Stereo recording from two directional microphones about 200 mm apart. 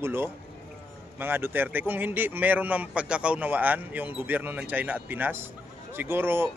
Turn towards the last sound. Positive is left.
turn(degrees=-10)  # may be behind; listen again after turning